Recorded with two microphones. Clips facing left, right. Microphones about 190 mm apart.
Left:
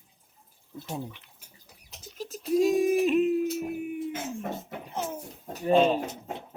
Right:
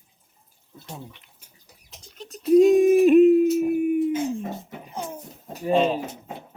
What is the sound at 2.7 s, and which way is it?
Speech, 55° right (ahead or behind).